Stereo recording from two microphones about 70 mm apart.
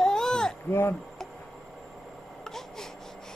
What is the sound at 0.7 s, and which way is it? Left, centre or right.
Speech, left.